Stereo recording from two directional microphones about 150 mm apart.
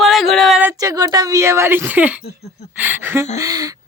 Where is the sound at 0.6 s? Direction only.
20° right (ahead or behind).